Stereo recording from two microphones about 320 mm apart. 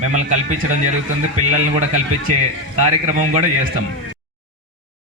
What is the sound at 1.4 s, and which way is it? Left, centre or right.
Speech, right.